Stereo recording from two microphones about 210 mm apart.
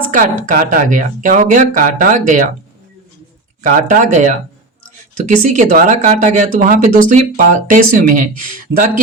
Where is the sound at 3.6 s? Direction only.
35° right (ahead or behind).